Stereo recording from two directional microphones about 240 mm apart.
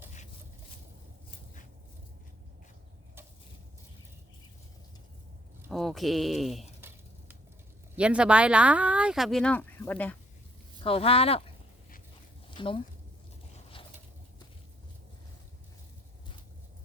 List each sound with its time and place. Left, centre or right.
5.6 s a sound: centre
7.9 s speech: centre
10.8 s speech: left
12.5 s speech: left